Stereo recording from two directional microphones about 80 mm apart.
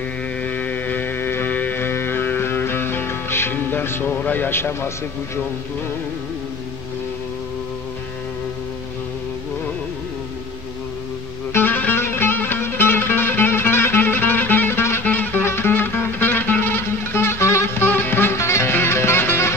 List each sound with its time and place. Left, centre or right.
0.4 s music: centre
4.2 s a man's voice: left
11.5 s music: left